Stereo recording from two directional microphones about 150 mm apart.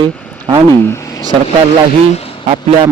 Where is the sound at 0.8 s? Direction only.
20° left (ahead or behind).